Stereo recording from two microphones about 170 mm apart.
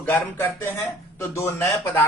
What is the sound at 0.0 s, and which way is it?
Speech, 10° left (ahead or behind).